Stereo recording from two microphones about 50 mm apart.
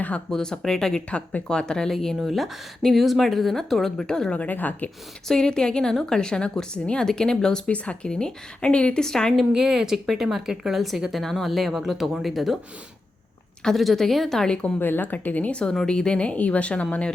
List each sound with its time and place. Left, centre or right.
0.3 s a woman's voice: centre
4.0 s a woman's voice: centre
4.4 s speech: left
5.3 s a woman's voice: centre
9.0 s a woman's voice: centre
9.5 s speech: centre
13.7 s a woman's voice: centre
14.8 s a woman's voice: left